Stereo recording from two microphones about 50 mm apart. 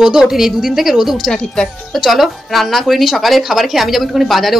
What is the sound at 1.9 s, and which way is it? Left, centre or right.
A woman's voice, centre.